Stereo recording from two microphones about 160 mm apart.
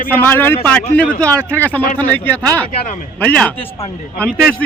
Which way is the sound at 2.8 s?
55° left (ahead or behind).